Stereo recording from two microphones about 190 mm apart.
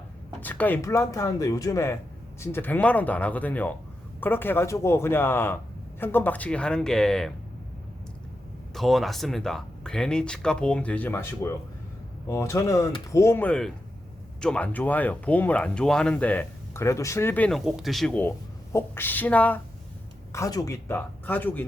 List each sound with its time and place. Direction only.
0.4 s speech: 10° left (ahead or behind)
8.7 s speech: centre (ahead or behind)